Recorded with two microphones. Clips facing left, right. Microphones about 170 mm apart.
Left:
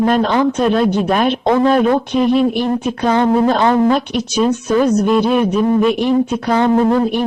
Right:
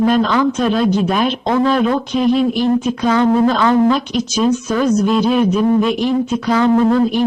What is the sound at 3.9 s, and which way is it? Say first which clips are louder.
Speech: left 2 dB; 60° left (ahead or behind).